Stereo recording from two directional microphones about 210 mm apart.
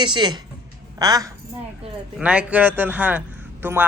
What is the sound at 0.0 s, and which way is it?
A woman's voice, 20° right (ahead or behind).